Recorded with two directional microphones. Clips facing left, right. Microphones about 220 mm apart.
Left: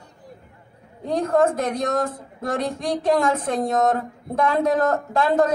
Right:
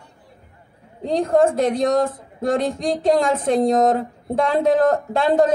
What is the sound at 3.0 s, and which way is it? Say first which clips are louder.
A man's voice: right 2 dB; 25° right (ahead or behind).